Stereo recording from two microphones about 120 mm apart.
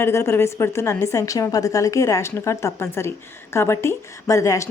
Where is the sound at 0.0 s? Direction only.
20° left (ahead or behind).